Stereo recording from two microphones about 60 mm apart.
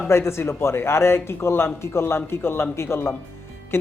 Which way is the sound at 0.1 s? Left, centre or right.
Left.